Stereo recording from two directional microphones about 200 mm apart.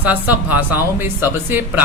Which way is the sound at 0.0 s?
10° right (ahead or behind).